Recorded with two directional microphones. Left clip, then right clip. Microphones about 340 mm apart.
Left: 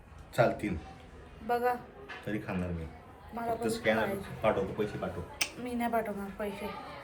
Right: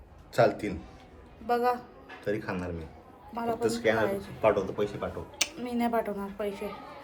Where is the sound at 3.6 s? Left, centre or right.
Centre.